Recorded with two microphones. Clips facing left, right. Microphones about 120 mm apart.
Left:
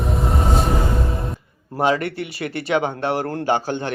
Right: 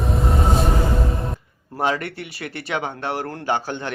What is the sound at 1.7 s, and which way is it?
Speech, 25° left (ahead or behind).